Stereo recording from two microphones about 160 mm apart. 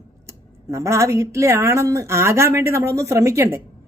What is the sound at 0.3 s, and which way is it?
A woman's voice, 20° right (ahead or behind).